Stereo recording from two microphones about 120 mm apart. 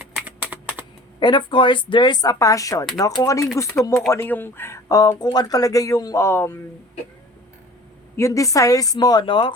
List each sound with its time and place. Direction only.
0.2 s typing: 10° right (ahead or behind)
1.2 s speech: 40° left (ahead or behind); by 6.6 s 20° left (ahead or behind)
8.1 s speech: 25° left (ahead or behind); by 9.5 s 40° left (ahead or behind)